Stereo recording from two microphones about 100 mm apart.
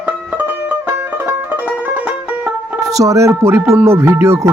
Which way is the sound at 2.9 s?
35° right (ahead or behind).